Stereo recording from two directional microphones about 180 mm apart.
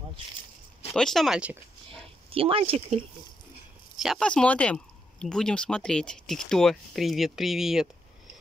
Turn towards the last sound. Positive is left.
turn(degrees=0)  # may be behind; listen again after turning